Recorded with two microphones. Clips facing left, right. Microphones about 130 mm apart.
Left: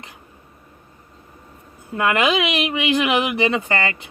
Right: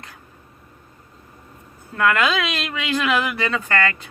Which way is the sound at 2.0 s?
20° left (ahead or behind).